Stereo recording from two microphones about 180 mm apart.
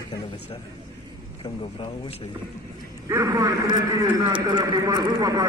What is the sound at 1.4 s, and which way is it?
Speech, 30° left (ahead or behind).